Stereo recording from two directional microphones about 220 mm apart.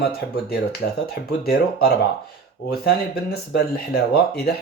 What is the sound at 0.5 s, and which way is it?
Speech, 45° left (ahead or behind).